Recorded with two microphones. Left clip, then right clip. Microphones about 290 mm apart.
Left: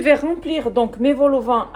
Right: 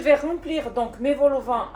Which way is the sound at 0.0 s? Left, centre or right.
Left.